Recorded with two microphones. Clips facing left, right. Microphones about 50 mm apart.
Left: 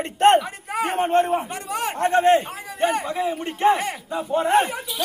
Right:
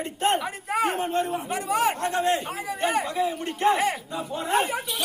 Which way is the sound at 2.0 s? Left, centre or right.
Left.